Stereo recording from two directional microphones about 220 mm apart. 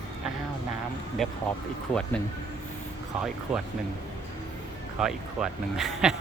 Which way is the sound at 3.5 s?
Centre (ahead or behind).